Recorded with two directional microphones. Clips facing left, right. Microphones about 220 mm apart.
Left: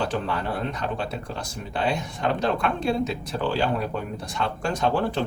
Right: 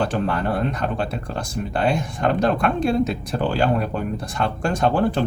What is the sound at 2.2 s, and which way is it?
Speech, 50° right (ahead or behind).